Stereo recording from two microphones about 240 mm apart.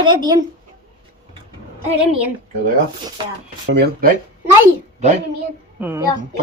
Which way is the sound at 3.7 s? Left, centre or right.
Right.